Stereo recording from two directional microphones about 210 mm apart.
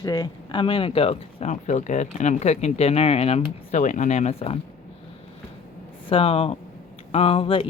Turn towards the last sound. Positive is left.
turn(degrees=25)  # may be behind; listen again after turning